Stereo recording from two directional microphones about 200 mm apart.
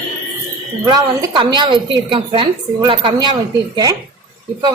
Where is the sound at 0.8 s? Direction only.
20° right (ahead or behind).